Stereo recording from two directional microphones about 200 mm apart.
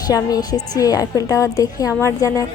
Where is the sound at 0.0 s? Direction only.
20° left (ahead or behind).